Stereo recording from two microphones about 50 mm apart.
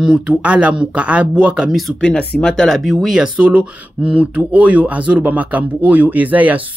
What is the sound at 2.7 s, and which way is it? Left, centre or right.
Speech, centre.